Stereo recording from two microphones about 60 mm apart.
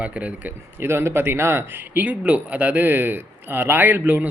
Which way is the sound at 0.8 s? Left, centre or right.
Right.